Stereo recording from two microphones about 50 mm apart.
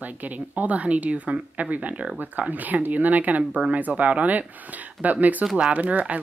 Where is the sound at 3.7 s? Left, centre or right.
Right.